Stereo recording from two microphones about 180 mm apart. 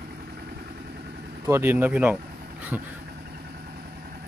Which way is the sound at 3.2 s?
60° right (ahead or behind).